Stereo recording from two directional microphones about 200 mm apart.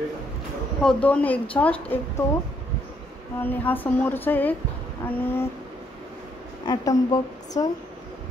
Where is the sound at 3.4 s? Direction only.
10° left (ahead or behind).